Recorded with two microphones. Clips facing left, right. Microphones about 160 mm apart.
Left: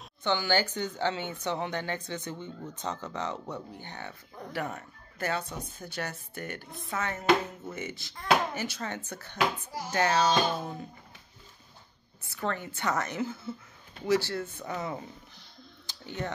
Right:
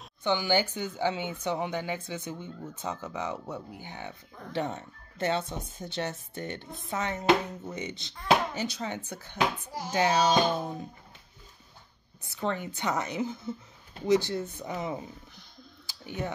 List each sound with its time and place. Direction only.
0.2 s speech: 15° right (ahead or behind)
4.5 s speech: 25° right (ahead or behind)
12.2 s speech: 20° right (ahead or behind)
15.9 s a sound: 10° right (ahead or behind)